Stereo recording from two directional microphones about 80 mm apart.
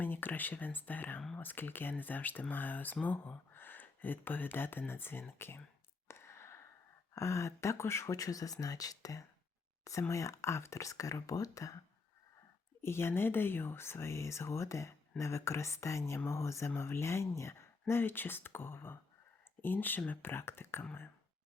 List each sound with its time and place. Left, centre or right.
0.0 s speech: left
6.1 s a sound: left
7.2 s speech: left
12.8 s speech: left